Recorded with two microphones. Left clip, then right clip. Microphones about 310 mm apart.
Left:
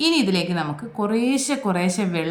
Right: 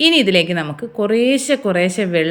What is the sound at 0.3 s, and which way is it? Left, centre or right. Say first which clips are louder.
A woman's voice: right 8 dB; centre.